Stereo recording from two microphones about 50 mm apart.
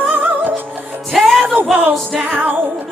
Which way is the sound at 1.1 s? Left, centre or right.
Centre.